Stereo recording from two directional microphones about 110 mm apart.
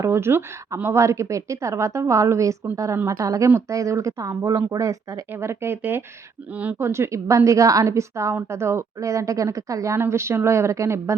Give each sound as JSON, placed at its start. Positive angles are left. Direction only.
{"t": 0.0, "sound": "a woman's voice", "side_deg": -25}